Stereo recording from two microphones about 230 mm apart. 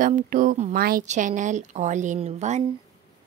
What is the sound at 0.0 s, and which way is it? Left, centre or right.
Speech, right.